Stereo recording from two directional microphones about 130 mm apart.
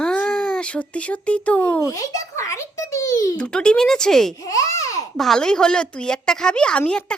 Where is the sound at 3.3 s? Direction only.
5° left (ahead or behind).